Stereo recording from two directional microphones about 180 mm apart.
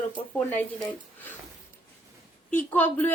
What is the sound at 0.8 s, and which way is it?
Speech, 10° left (ahead or behind).